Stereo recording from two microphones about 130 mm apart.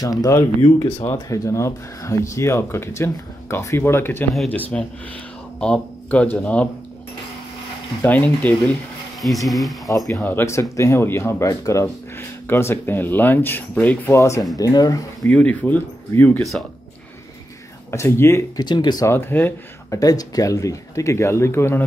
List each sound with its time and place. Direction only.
0.0 s speech: 25° left (ahead or behind); by 6.7 s 10° left (ahead or behind)
8.0 s speech: 10° left (ahead or behind)
9.2 s speech: centre (ahead or behind)
10.2 s speech: 20° left (ahead or behind)
15.2 s speech: 10° left (ahead or behind)
17.9 s speech: 20° left (ahead or behind)
18.6 s speech: 35° left (ahead or behind)
19.1 s speech: 15° left (ahead or behind)
20.0 s speech: 30° left (ahead or behind)